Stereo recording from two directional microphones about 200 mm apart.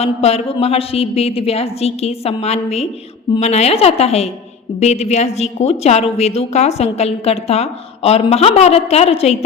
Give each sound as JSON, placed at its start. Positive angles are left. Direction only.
{"t": 0.0, "sound": "a woman's voice", "side_deg": 30}